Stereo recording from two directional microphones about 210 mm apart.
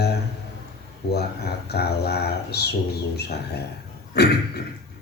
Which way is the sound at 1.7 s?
50° left (ahead or behind).